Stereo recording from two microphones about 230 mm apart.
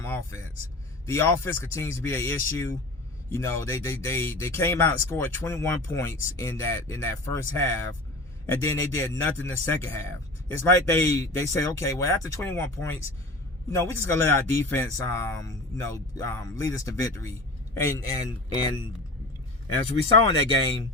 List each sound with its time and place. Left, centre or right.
0.0 s speech: centre
20.2 s speech: left